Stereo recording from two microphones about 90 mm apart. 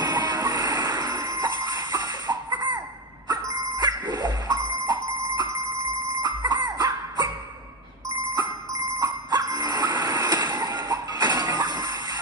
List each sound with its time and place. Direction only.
0.0 s music: 50° right (ahead or behind)
3.3 s a sound: 50° right (ahead or behind)
6.2 s cough: 50° right (ahead or behind)
9.0 s train: 45° right (ahead or behind)